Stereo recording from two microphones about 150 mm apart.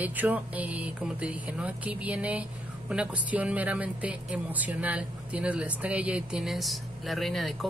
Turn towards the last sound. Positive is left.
turn(degrees=0)  # may be behind; listen again after turning